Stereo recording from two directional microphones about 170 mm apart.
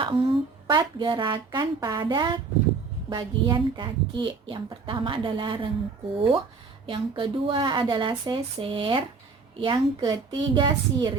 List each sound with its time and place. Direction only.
0.0 s a woman's voice: 30° right (ahead or behind)